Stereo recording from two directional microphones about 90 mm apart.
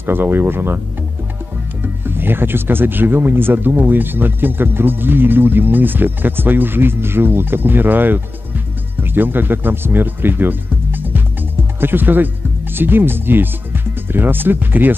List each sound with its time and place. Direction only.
0.0 s speech: 20° right (ahead or behind)
1.8 s speech: 25° right (ahead or behind)